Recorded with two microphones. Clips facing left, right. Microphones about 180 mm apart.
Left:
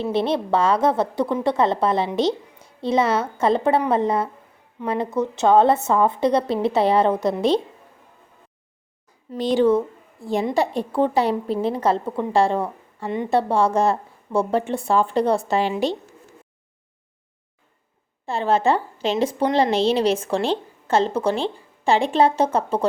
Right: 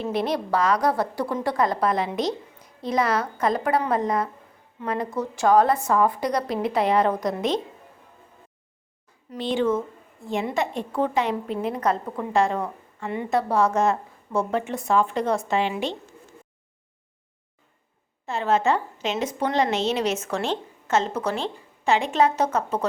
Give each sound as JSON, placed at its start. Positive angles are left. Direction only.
{"t": 0.0, "sound": "a woman's voice", "side_deg": 30}
{"t": 9.4, "sound": "a woman's voice", "side_deg": 40}
{"t": 18.3, "sound": "a woman's voice", "side_deg": 30}